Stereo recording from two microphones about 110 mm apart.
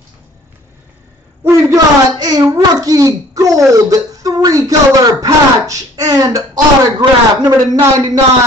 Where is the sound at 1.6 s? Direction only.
35° right (ahead or behind).